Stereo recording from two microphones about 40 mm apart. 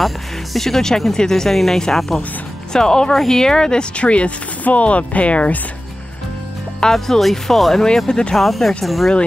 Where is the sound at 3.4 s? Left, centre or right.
Centre; by 5.6 s left.